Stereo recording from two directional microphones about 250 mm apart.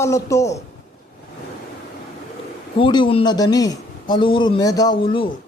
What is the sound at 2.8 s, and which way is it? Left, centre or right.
A man's voice, centre.